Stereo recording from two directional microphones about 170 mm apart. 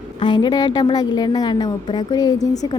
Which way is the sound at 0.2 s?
25° left (ahead or behind).